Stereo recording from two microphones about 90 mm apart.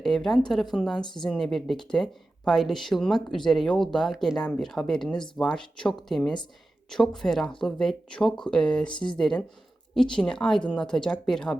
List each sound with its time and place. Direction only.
0.0 s a woman's voice: 5° left (ahead or behind)
8.9 s speech: 60° left (ahead or behind)
9.1 s a woman's voice: 5° left (ahead or behind)